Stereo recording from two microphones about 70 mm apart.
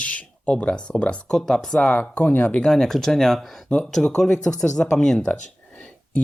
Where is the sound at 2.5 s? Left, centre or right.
Centre.